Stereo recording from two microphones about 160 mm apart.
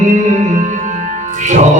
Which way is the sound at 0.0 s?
50° right (ahead or behind).